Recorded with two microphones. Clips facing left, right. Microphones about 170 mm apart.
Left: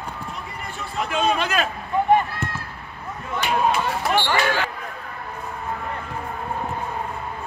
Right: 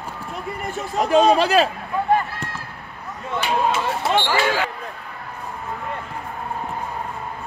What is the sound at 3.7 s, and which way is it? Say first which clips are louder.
Speech: right 1 dB; 20° right (ahead or behind).